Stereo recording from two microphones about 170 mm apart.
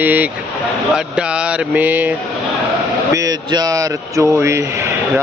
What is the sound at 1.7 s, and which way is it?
Speech, 10° right (ahead or behind).